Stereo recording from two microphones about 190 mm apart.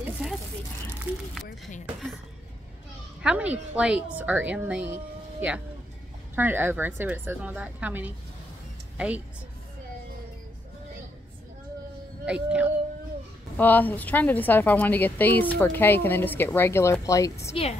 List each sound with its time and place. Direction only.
0.0 s a sound: 5° right (ahead or behind)
3.2 s a woman's voice: 5° right (ahead or behind)
6.3 s a woman's voice: 10° right (ahead or behind)
12.3 s a woman's voice: 5° right (ahead or behind)
13.6 s a woman's voice: 10° left (ahead or behind)
17.5 s a woman's voice: 35° left (ahead or behind)